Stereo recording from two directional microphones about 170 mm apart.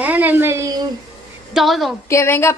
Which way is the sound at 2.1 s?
15° left (ahead or behind).